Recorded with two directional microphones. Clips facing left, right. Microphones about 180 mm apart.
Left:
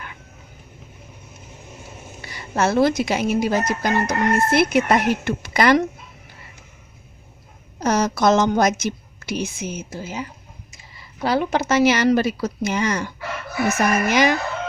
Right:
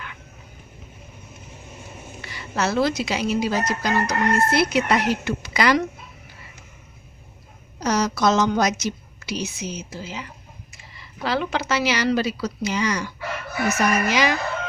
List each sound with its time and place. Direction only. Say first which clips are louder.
2.3 s a sound: left 4 dB; 45° left (ahead or behind)
2.8 s a woman's voice: left 4 dB; 50° left (ahead or behind)
7.8 s a woman's voice: left 2 dB; 50° left (ahead or behind)